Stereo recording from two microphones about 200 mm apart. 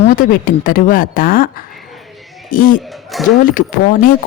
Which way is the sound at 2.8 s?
Centre (ahead or behind).